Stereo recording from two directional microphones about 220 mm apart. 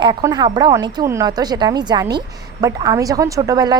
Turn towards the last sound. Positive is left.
turn(degrees=-15)  # may be behind; listen again after turning